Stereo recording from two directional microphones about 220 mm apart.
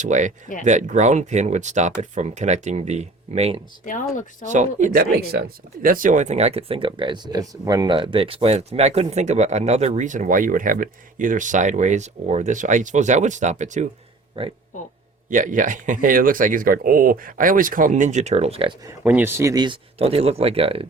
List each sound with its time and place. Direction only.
0.0 s speech: 35° right (ahead or behind)
4.1 s speech: 35° left (ahead or behind)
4.4 s speech: 35° right (ahead or behind)
15.3 s speech: 35° right (ahead or behind)
18.9 s speech: 10° right (ahead or behind); by 20.8 s 25° right (ahead or behind)